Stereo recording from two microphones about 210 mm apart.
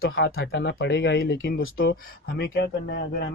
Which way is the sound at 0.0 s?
70° left (ahead or behind).